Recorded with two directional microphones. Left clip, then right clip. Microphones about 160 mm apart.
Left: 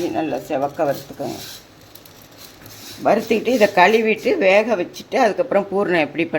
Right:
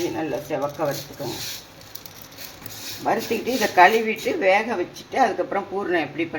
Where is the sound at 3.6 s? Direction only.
80° left.